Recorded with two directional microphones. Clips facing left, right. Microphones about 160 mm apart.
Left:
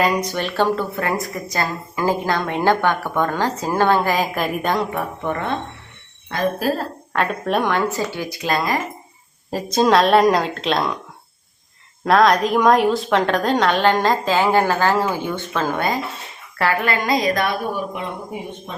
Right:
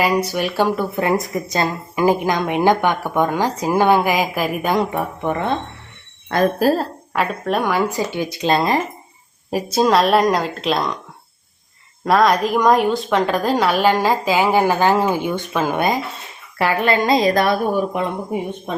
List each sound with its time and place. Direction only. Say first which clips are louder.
0.0 s speech: right 2 dB; 10° right (ahead or behind)
6.3 s speech: right 5 dB; 40° right (ahead or behind)
7.1 s speech: even; 5° right (ahead or behind); by 8.8 s 25° right (ahead or behind)
9.5 s a woman's voice: even; 10° right (ahead or behind)
12.0 s speech: even; centre (ahead or behind); by 17.5 s 35° right (ahead or behind)
17.9 s speech: right 6 dB; 50° right (ahead or behind)